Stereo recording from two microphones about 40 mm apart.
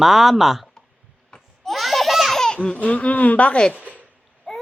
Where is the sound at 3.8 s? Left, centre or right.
Right.